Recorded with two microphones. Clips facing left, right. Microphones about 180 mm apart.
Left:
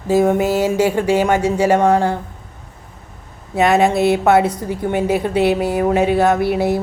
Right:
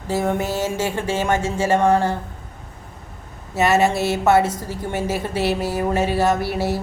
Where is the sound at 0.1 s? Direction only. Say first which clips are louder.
Left 7 dB; 15° left (ahead or behind).